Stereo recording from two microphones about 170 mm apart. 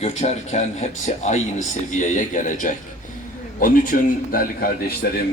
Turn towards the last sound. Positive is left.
turn(degrees=60)  # may be behind; listen again after turning